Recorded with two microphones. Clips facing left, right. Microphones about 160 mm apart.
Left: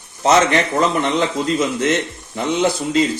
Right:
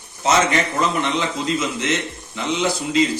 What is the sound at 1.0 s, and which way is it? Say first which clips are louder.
A man's voice: left 4 dB; 50° left (ahead or behind).